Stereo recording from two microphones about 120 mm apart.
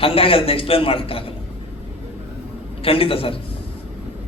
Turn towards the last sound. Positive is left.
turn(degrees=50)  # may be behind; listen again after turning